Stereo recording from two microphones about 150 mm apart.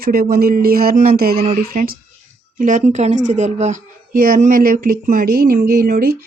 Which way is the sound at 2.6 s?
55° right (ahead or behind).